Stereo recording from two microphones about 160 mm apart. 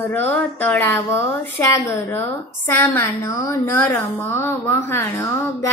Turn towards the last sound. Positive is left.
turn(degrees=15)  # may be behind; listen again after turning